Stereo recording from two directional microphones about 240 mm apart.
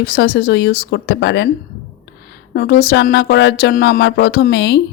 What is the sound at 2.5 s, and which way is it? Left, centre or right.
Speech, left.